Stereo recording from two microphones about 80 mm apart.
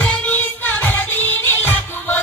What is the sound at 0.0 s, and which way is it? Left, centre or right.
Music, centre.